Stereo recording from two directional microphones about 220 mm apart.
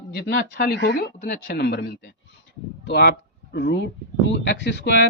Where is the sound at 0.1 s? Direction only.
45° left (ahead or behind).